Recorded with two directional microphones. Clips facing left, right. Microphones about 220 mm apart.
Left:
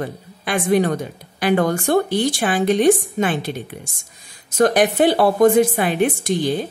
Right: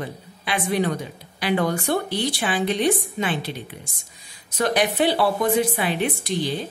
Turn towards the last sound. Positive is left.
turn(degrees=50)  # may be behind; listen again after turning